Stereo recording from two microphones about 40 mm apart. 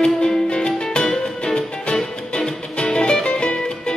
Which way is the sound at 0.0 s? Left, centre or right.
Centre.